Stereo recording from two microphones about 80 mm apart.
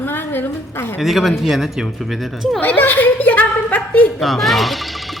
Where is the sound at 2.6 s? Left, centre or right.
Left.